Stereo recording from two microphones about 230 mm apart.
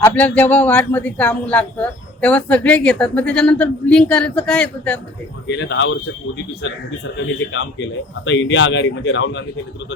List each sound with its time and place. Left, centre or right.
0.0 s speech: centre
5.5 s speech: left